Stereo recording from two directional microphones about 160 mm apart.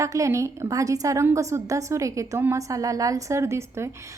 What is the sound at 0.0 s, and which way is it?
A woman's voice, 20° right (ahead or behind).